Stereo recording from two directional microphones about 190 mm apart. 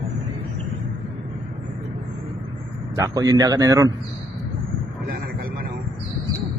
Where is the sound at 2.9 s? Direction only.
15° right (ahead or behind).